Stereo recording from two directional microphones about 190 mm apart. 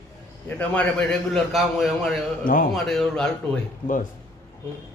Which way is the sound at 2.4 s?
45° left (ahead or behind).